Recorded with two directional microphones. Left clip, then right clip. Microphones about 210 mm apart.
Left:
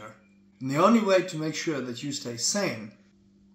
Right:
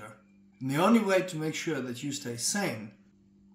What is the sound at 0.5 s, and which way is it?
A man's voice, 25° right (ahead or behind).